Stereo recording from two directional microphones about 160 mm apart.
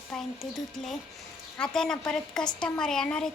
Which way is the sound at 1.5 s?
5° left (ahead or behind).